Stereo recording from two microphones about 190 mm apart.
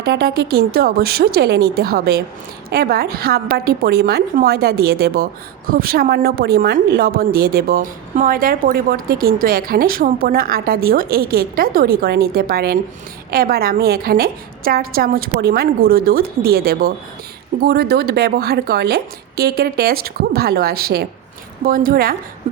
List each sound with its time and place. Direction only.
0.0 s a woman's voice: 55° right (ahead or behind)